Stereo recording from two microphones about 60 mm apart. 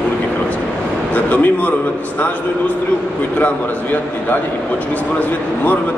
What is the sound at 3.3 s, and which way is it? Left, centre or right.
A man's voice, left.